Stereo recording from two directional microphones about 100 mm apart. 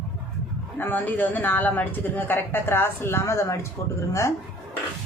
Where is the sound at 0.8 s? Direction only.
15° left (ahead or behind).